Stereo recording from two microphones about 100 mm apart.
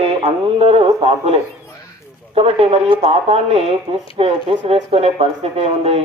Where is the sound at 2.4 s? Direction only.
75° right (ahead or behind); by 4.0 s 90° right.